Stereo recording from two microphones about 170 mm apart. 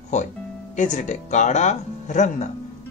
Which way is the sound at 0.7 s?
45° left (ahead or behind).